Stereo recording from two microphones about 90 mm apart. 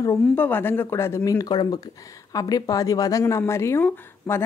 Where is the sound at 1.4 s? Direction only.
50° left (ahead or behind).